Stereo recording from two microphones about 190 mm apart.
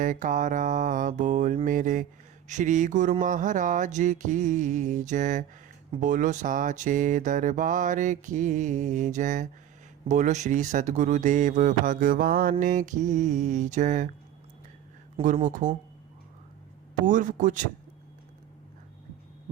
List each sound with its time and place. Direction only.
0.0 s mantra: 45° right (ahead or behind)
2.5 s speech: 40° right (ahead or behind)
15.4 s mantra: 45° right (ahead or behind)
17.1 s mantra: 40° right (ahead or behind)